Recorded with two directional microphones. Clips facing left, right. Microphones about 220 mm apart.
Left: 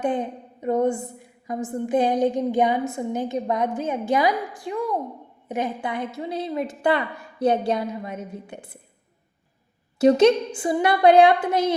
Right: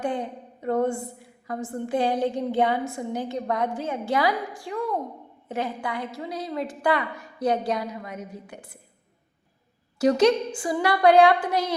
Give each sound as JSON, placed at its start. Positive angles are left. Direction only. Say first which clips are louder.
{"t": 0.0, "sound": "a woman's voice", "louder": "left 4 dB", "side_deg": 20}
{"t": 10.0, "sound": "a woman's voice", "louder": "left 3 dB", "side_deg": 25}